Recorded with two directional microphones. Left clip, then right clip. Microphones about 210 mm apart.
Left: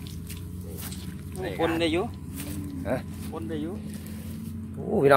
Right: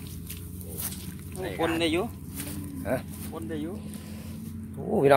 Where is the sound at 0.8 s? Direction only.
40° right (ahead or behind).